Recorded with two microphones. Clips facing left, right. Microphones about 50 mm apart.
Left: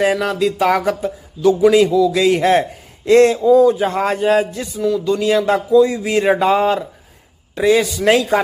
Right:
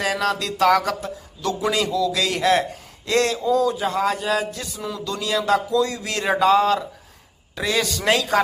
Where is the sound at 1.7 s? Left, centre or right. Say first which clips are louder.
Left 9 dB; centre.